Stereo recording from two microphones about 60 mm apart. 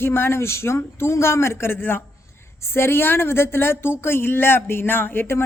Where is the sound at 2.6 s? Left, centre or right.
Left.